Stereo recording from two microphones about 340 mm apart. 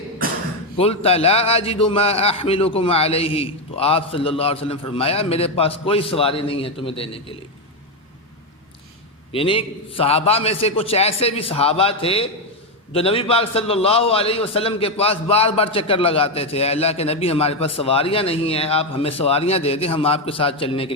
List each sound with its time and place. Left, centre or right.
0.8 s a man's voice: centre
9.3 s a man's voice: centre